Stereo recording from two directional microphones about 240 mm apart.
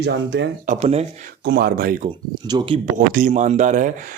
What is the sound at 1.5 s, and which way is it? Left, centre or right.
Speech, right.